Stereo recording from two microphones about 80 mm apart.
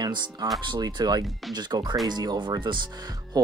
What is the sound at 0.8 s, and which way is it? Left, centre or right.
Speech, right.